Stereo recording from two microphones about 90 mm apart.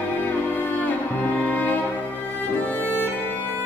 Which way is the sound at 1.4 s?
20° left (ahead or behind).